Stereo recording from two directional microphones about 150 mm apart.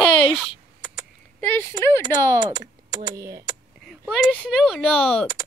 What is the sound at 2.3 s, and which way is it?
Speech, 30° right (ahead or behind).